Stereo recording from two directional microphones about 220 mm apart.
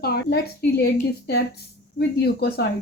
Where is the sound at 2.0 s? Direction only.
50° left (ahead or behind).